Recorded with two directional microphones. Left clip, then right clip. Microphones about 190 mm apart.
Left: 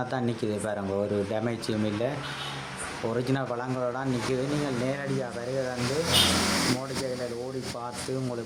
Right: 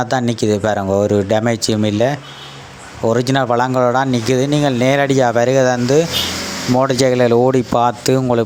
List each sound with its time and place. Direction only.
0.1 s speech: 40° right (ahead or behind)
6.7 s speech: 50° right (ahead or behind)